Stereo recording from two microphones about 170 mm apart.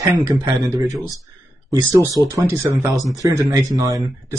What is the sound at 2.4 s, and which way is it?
Speech, 20° right (ahead or behind).